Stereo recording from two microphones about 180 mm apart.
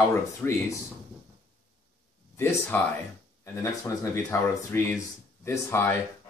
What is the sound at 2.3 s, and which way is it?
Speech, 10° left (ahead or behind).